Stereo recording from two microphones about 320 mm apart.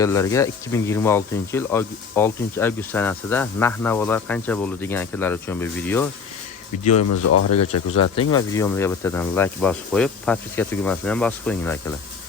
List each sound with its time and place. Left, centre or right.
0.0 s speech: centre
6.8 s speech: left
8.3 s speech: centre